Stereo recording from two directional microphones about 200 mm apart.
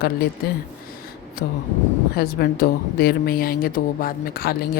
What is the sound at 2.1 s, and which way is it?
A woman's voice, 50° left (ahead or behind).